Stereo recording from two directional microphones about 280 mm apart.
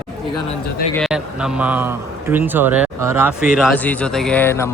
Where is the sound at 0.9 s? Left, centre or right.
Centre.